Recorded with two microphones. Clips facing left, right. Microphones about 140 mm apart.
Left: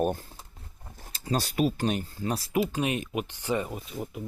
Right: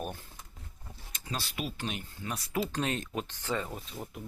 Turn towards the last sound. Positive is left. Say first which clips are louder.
# left 6 dB
turn(degrees=10)  # may be behind; listen again after turning